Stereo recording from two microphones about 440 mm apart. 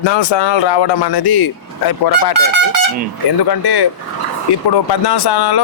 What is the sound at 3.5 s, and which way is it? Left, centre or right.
Speech, left.